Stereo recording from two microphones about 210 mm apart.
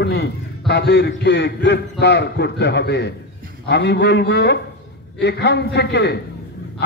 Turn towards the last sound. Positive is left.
turn(degrees=55)  # may be behind; listen again after turning